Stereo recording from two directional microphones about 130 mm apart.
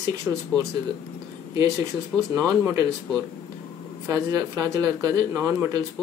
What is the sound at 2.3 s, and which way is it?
Speech, 25° right (ahead or behind).